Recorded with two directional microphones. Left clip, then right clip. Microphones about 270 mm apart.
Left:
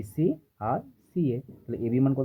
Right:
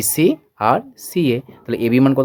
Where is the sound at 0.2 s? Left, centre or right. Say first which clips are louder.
Right 12 dB; right.